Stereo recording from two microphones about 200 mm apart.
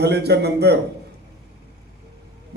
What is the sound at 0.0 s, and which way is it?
Speech, 55° right (ahead or behind).